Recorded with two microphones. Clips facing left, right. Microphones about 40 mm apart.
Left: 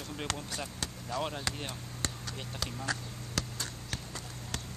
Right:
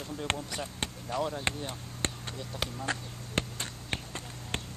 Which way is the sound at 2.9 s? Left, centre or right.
Right.